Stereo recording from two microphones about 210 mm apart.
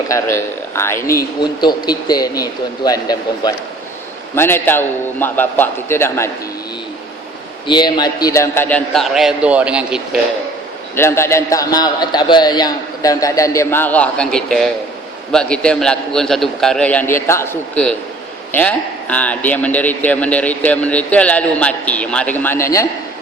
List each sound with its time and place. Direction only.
0.1 s a man's voice: 10° left (ahead or behind)
7.7 s a man's voice: 20° left (ahead or behind); by 10.0 s 5° right (ahead or behind)
10.9 s a man's voice: 10° left (ahead or behind)